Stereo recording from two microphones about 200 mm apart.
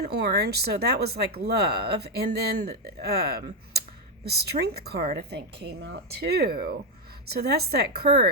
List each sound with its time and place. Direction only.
0.0 s speech: 50° right (ahead or behind)